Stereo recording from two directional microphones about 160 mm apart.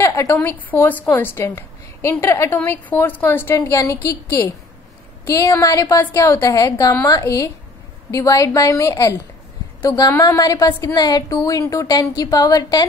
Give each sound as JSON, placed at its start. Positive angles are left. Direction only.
{"t": 0.0, "sound": "a woman's voice", "side_deg": 15}